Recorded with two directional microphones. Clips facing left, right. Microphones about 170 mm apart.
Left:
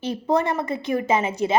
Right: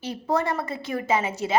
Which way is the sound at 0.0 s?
20° left (ahead or behind).